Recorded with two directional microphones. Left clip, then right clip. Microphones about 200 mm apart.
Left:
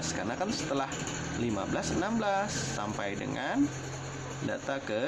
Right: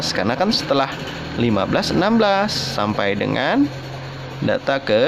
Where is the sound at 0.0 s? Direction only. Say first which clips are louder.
Right 14 dB; 45° right (ahead or behind).